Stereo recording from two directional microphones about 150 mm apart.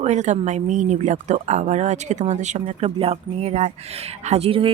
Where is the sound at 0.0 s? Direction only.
50° right (ahead or behind).